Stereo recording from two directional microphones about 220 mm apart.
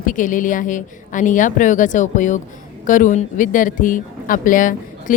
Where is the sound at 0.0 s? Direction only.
35° left (ahead or behind).